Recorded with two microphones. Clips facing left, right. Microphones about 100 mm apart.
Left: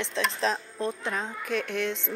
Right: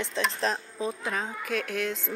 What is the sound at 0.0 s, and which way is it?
Speech, centre (ahead or behind).